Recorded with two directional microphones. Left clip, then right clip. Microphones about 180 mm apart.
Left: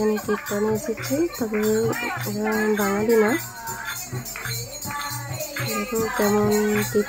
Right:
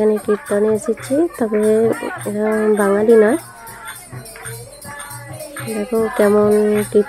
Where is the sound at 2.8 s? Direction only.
20° right (ahead or behind).